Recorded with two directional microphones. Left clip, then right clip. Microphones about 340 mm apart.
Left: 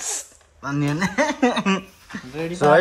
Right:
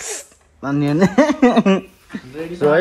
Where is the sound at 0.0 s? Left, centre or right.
Centre.